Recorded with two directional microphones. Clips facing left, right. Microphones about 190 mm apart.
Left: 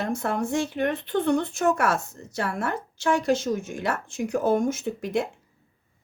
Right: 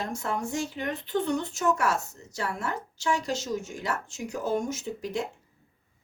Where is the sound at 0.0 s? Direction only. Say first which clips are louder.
Left 5 dB; 60° left (ahead or behind).